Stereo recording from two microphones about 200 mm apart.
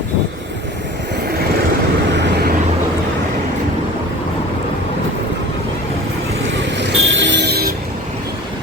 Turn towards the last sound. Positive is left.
turn(degrees=-50)  # may be behind; listen again after turning